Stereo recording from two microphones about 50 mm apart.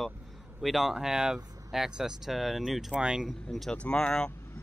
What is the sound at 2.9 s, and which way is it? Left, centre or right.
Speech, right.